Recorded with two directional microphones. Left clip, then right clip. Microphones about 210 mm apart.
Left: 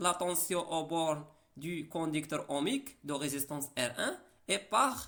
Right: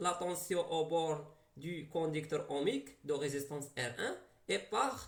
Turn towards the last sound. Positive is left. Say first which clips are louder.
# left 5 dB
turn(degrees=50)  # may be behind; listen again after turning